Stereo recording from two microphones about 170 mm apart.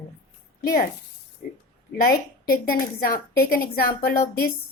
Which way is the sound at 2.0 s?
65° left (ahead or behind).